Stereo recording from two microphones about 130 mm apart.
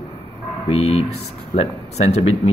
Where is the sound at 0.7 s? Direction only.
50° left (ahead or behind).